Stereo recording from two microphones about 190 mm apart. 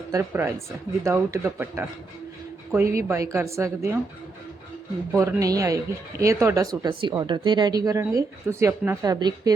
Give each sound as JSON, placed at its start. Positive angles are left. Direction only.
{"t": 0.1, "sound": "speech", "side_deg": -15}
{"t": 5.1, "sound": "speech", "side_deg": -15}